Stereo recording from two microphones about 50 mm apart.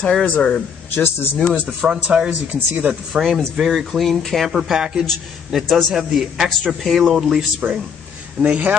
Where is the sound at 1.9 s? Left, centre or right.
Centre.